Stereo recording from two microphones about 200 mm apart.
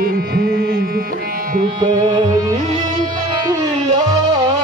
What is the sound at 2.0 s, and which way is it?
Music, 20° right (ahead or behind).